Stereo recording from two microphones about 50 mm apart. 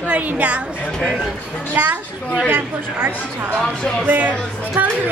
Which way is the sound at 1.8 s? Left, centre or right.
Right.